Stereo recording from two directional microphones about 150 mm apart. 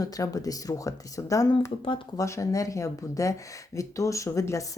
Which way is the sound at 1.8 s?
35° left (ahead or behind).